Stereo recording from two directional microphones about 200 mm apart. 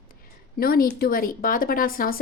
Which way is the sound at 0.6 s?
50° left (ahead or behind).